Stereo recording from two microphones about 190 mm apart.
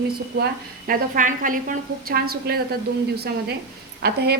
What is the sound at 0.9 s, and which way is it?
A woman's voice, 45° right (ahead or behind).